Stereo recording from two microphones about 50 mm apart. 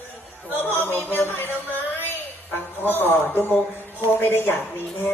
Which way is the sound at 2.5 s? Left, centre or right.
Left.